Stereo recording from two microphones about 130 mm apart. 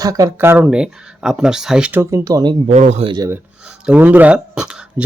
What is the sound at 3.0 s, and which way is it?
Speech, 35° right (ahead or behind).